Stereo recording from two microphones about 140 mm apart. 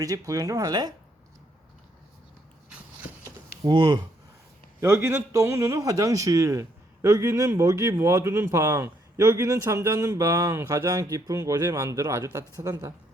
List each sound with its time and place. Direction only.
0.0 s a man's voice: 25° right (ahead or behind)
3.6 s speech: 30° right (ahead or behind)
4.8 s a man's voice: 20° right (ahead or behind)